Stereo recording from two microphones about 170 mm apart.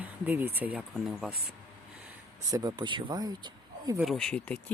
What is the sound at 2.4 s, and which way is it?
Speech, 20° right (ahead or behind).